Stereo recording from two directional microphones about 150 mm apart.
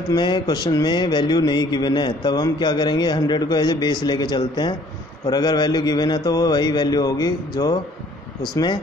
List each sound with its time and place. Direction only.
0.1 s speech: 30° left (ahead or behind)